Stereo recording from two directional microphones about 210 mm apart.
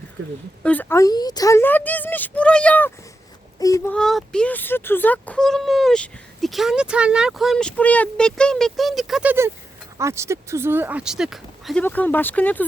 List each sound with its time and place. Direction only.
0.6 s speech: 10° left (ahead or behind)
3.9 s speech: 5° left (ahead or behind)